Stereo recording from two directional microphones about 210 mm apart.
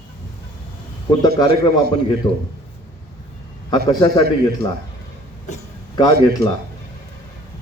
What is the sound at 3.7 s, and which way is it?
A man's voice, 20° left (ahead or behind).